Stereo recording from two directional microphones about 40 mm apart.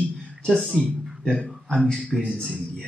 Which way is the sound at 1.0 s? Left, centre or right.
Centre.